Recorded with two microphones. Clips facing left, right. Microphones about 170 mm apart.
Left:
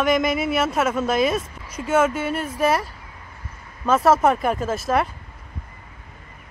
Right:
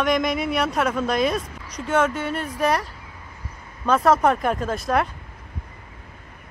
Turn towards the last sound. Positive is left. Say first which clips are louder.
# left 1 dB
turn(degrees=5)  # may be behind; listen again after turning